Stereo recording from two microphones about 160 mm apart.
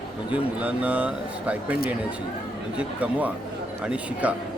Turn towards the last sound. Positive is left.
turn(degrees=-5)  # may be behind; listen again after turning